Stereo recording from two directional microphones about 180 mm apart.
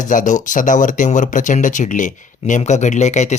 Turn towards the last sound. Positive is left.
turn(degrees=40)  # may be behind; listen again after turning